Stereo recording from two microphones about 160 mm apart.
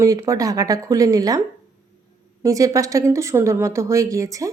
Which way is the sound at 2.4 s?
20° right (ahead or behind).